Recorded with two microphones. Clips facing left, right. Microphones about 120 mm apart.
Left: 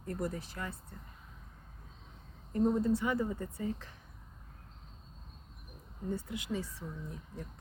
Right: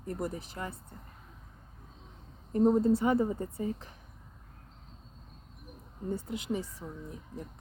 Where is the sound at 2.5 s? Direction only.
30° right (ahead or behind).